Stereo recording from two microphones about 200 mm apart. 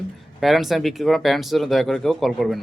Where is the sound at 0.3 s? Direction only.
Centre (ahead or behind).